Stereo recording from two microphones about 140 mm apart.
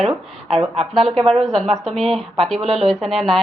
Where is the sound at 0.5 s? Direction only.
45° right (ahead or behind).